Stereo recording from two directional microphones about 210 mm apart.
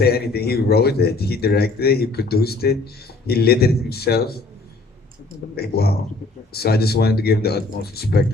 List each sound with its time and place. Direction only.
0.0 s speech: 50° left (ahead or behind)
5.5 s speech: 50° left (ahead or behind)